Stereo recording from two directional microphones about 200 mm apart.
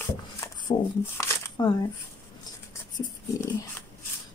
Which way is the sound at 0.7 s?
20° left (ahead or behind).